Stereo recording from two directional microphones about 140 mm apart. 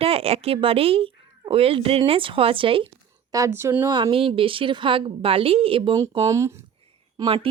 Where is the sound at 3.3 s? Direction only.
20° right (ahead or behind).